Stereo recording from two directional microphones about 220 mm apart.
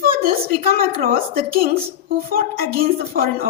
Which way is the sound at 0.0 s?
40° right (ahead or behind).